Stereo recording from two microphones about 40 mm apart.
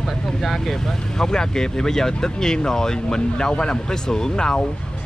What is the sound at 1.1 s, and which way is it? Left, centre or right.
Speech, centre.